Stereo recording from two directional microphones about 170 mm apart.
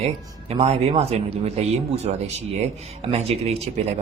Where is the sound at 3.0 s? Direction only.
35° right (ahead or behind).